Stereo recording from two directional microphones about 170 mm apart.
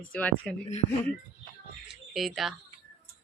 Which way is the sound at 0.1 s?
10° left (ahead or behind).